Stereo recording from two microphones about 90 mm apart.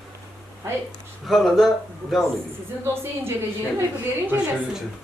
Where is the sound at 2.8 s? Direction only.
25° right (ahead or behind).